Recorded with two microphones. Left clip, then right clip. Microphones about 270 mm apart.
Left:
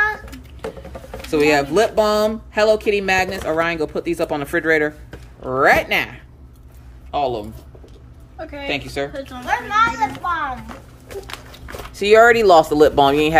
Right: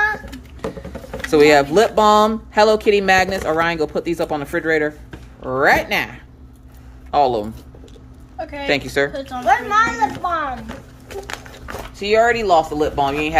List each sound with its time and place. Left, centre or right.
1.3 s speech: centre
8.4 s speech: right
8.6 s a woman's voice: centre
9.5 s speech: centre
11.9 s speech: centre